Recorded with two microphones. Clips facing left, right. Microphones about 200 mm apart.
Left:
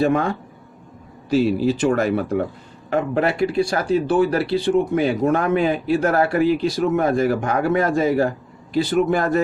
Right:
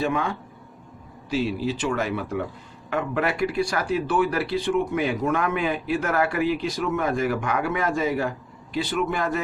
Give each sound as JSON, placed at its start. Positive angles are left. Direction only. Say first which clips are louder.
{"t": 0.0, "sound": "speech", "louder": "left 6 dB", "side_deg": 40}
{"t": 2.9, "sound": "speech", "louder": "left 5 dB", "side_deg": 30}